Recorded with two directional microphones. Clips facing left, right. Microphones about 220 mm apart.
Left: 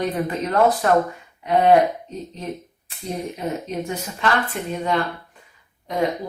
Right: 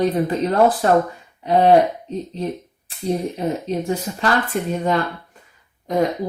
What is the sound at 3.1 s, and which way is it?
Speech, 30° right (ahead or behind).